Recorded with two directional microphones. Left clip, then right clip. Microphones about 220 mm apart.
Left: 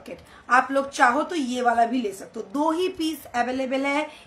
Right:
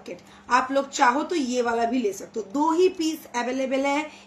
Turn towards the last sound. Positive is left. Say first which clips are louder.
# even
turn(degrees=20)  # may be behind; listen again after turning